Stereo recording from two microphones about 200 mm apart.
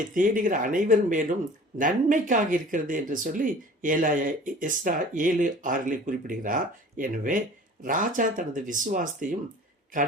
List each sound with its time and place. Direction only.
0.1 s speech: 40° right (ahead or behind)